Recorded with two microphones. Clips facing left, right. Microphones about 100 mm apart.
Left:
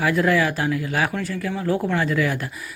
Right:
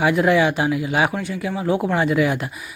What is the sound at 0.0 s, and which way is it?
Speech, 20° right (ahead or behind).